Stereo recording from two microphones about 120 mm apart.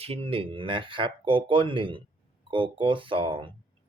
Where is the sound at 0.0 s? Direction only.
55° right (ahead or behind).